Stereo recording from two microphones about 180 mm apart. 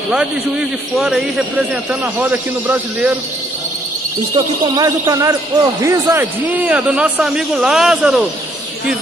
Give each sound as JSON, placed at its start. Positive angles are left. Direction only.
{"t": 0.9, "sound": "a man's voice", "side_deg": 0}
{"t": 4.7, "sound": "speech", "side_deg": -20}
{"t": 6.7, "sound": "a man's voice", "side_deg": -5}